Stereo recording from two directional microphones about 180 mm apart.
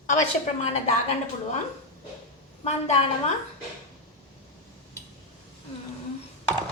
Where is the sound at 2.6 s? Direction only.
35° left (ahead or behind).